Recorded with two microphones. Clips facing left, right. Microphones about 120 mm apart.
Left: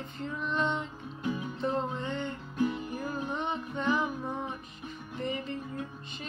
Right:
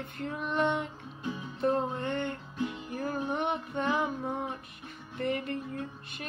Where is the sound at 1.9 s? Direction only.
55° right (ahead or behind).